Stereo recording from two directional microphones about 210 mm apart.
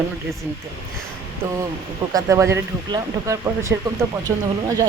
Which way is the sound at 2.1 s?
15° right (ahead or behind).